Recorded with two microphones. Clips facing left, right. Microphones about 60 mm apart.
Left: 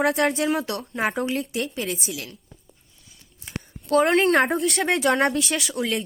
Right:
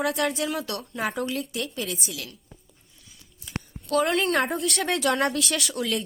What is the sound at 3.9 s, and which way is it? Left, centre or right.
Speech, left.